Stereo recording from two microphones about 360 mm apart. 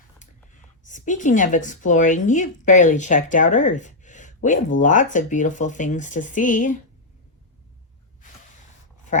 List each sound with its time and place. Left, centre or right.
0.9 s speech: left